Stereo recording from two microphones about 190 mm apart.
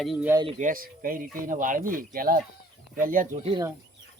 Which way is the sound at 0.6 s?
45° right (ahead or behind).